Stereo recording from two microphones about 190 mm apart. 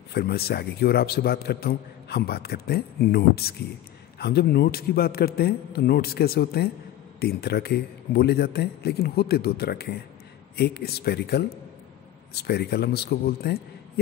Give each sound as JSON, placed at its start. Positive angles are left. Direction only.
{"t": 0.1, "sound": "a man's voice", "side_deg": 55}